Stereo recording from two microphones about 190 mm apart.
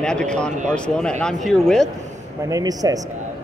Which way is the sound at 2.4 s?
20° right (ahead or behind).